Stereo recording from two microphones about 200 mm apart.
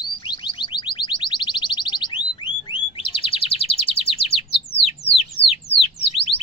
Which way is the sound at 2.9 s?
25° left (ahead or behind).